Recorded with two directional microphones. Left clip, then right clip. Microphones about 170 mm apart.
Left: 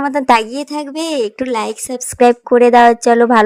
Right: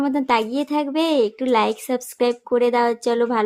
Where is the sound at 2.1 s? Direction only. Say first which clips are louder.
Left 11 dB; 40° left (ahead or behind).